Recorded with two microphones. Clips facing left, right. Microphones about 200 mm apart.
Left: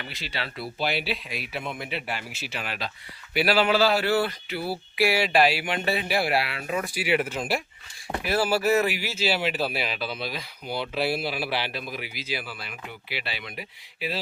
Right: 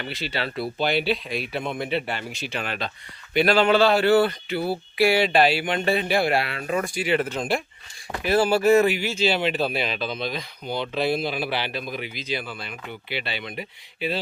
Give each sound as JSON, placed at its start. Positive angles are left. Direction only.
{"t": 0.1, "sound": "speech", "side_deg": 0}